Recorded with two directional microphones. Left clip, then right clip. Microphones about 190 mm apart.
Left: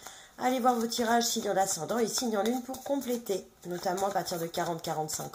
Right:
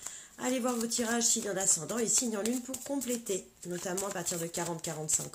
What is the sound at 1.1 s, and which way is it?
Speech, 35° right (ahead or behind).